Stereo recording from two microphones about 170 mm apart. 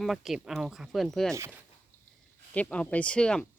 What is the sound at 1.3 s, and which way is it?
Speech, 15° right (ahead or behind).